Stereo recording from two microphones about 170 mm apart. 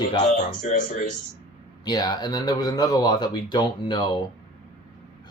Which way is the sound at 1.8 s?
25° left (ahead or behind).